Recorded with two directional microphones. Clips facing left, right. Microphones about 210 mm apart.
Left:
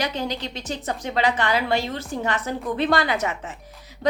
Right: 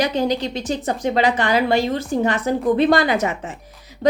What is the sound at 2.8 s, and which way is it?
Speech, 15° right (ahead or behind).